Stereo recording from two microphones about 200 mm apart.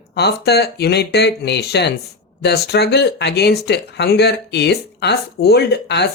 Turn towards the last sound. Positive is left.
turn(degrees=60)  # may be behind; listen again after turning